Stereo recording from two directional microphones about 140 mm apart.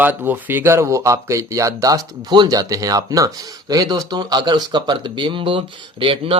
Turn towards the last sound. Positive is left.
turn(degrees=-40)  # may be behind; listen again after turning